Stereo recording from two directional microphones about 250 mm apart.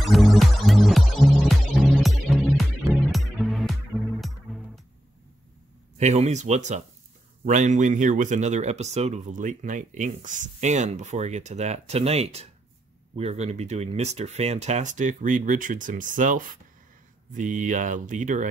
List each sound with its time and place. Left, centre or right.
0.0 s music: centre
5.9 s speech: right